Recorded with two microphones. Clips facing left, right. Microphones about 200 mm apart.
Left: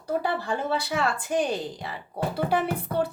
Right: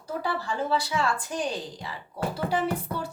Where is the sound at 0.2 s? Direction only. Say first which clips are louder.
Left 2 dB; 60° left (ahead or behind).